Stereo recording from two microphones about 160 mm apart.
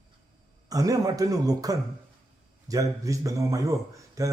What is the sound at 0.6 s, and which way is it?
Speech, 20° right (ahead or behind).